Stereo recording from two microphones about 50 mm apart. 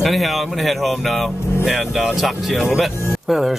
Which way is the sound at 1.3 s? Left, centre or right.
Left.